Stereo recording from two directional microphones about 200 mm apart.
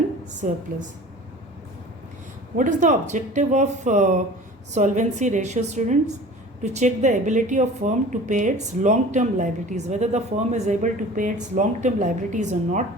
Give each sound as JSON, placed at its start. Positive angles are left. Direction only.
{"t": 0.4, "sound": "speech", "side_deg": -40}
{"t": 2.6, "sound": "speech", "side_deg": -40}